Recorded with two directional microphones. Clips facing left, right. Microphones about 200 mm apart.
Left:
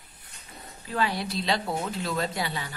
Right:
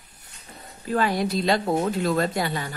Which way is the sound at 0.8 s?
45° right (ahead or behind).